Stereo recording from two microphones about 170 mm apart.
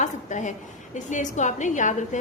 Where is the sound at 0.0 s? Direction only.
45° left (ahead or behind).